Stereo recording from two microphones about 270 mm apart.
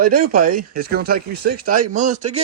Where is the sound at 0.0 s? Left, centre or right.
Right.